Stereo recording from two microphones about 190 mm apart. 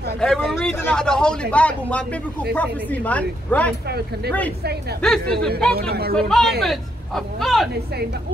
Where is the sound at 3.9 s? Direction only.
60° right (ahead or behind).